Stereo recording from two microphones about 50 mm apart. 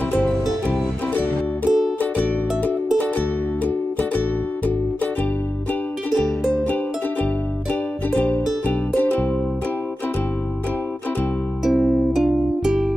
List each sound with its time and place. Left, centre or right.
0.7 s music: left
8.1 s music: left
11.8 s music: centre
12.2 s music: centre